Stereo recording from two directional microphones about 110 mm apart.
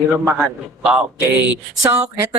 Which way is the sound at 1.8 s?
30° right (ahead or behind).